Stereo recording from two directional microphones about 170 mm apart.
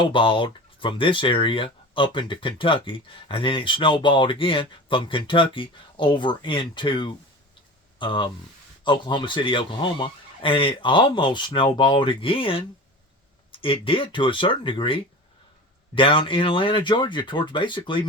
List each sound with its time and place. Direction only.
0.0 s speech: 30° left (ahead or behind)